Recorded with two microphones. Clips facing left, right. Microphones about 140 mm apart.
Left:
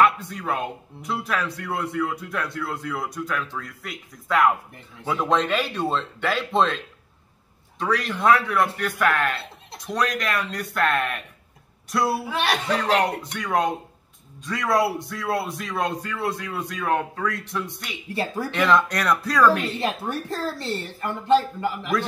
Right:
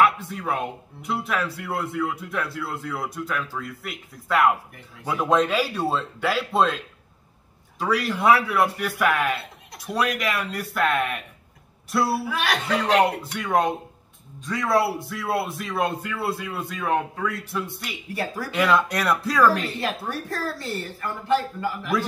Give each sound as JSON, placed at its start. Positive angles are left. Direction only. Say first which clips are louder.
{"t": 0.0, "sound": "speech", "louder": "even", "side_deg": -5}
{"t": 7.8, "sound": "a man's voice", "louder": "right 1 dB", "side_deg": -10}
{"t": 12.2, "sound": "a woman's voice", "louder": "left 1 dB", "side_deg": 25}
{"t": 12.8, "sound": "speech", "louder": "right 5 dB", "side_deg": -5}
{"t": 18.1, "sound": "a woman's voice", "louder": "left 2 dB", "side_deg": 25}
{"t": 18.5, "sound": "speech", "louder": "even", "side_deg": -5}
{"t": 19.8, "sound": "a woman's voice", "louder": "left 2 dB", "side_deg": 20}